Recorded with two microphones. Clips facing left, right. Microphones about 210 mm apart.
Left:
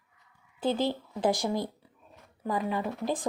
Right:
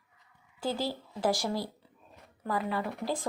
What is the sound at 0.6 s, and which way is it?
Speech, 20° left (ahead or behind).